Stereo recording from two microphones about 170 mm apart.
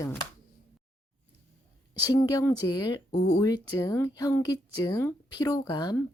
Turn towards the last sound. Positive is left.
turn(degrees=25)  # may be behind; listen again after turning